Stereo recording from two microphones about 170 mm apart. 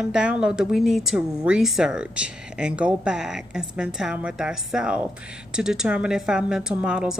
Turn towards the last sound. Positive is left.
turn(degrees=-5)  # may be behind; listen again after turning